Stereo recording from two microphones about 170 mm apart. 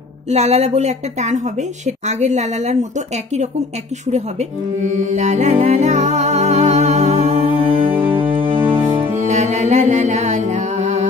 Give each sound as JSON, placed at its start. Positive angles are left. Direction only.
{"t": 0.3, "sound": "speech", "side_deg": -40}
{"t": 4.1, "sound": "speech", "side_deg": -45}
{"t": 8.2, "sound": "music", "side_deg": -30}
{"t": 8.8, "sound": "music", "side_deg": -45}